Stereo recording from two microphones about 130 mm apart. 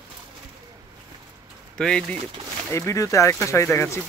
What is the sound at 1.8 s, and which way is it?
Speech, 5° left (ahead or behind).